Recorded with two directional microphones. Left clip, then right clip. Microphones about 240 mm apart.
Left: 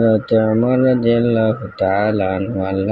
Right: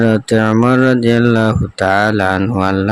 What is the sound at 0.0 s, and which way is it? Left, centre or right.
Speech, right.